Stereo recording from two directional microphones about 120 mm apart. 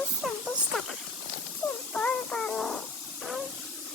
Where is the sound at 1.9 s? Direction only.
10° left (ahead or behind).